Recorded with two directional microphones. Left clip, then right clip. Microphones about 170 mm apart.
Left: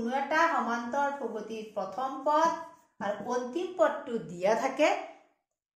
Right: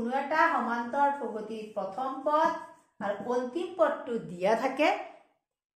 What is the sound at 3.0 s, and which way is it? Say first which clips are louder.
Speech: right 1 dB; 5° right (ahead or behind).